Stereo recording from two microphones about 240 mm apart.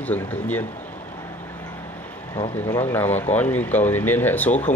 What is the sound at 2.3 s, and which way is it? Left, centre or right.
Speech, left.